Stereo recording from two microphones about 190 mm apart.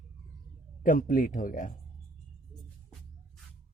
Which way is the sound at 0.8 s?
45° left (ahead or behind).